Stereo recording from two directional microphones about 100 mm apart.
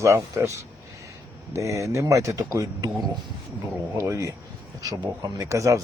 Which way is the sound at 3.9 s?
30° right (ahead or behind).